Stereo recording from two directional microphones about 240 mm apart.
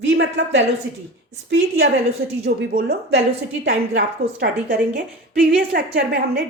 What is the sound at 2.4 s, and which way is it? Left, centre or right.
Speech, right.